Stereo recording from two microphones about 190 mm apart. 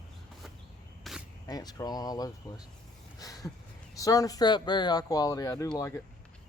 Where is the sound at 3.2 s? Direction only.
20° left (ahead or behind).